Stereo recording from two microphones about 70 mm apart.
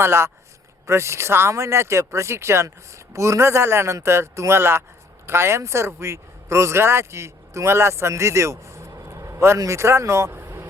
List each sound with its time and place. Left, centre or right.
0.0 s speech: right